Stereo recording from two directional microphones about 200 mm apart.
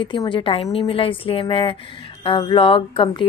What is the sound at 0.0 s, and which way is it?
A woman's voice, 25° left (ahead or behind).